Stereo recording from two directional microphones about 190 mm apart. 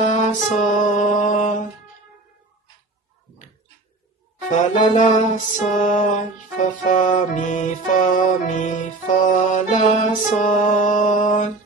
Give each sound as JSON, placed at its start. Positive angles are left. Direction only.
{"t": 0.0, "sound": "music", "side_deg": 40}
{"t": 4.5, "sound": "music", "side_deg": 40}